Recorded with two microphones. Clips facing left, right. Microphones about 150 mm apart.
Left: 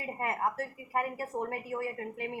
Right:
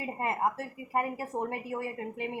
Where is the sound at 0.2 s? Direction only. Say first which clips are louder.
Right 2 dB; 20° right (ahead or behind).